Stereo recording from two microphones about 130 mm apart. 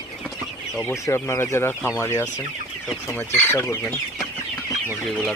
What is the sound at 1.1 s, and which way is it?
Speech, 20° left (ahead or behind).